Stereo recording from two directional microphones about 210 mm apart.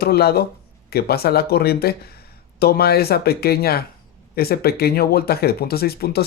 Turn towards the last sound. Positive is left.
turn(degrees=45)  # may be behind; listen again after turning